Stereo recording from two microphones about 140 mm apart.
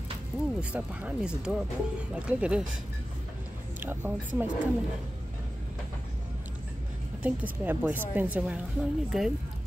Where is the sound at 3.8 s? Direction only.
15° right (ahead or behind).